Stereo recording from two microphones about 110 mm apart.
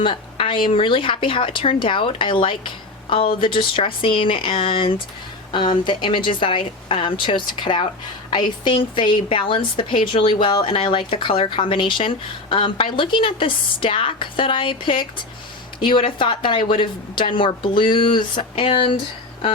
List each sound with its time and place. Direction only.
0.0 s a woman's voice: 55° left (ahead or behind)